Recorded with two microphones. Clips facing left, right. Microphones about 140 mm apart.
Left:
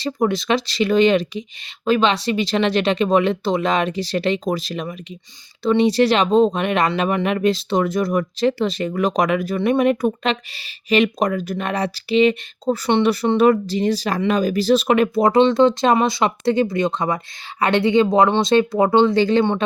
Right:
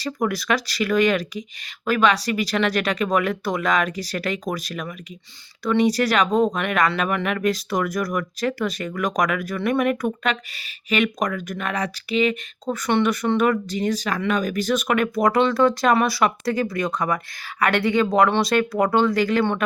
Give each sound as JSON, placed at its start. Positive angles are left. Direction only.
{"t": 0.0, "sound": "speech", "side_deg": 25}